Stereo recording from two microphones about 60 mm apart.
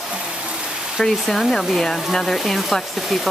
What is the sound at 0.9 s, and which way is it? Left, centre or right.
Speech, centre.